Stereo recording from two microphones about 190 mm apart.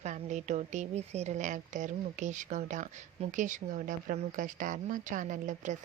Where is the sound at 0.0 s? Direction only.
40° right (ahead or behind).